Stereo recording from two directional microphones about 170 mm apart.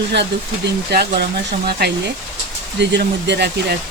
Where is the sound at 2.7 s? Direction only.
90° right.